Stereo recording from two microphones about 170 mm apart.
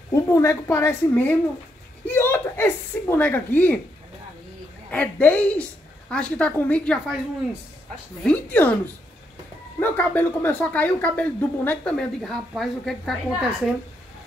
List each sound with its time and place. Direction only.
0.1 s speech: 15° left (ahead or behind)
4.9 s speech: 10° left (ahead or behind)
8.2 s speech: 10° left (ahead or behind)
9.8 s speech: 10° left (ahead or behind)